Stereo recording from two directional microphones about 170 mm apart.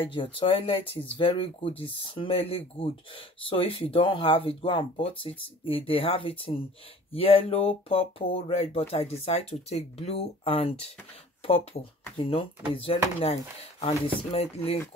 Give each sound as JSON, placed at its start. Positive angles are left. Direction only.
{"t": 0.1, "sound": "speech", "side_deg": 30}